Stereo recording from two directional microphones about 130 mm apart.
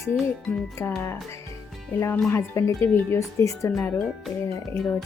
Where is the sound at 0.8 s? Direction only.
20° left (ahead or behind).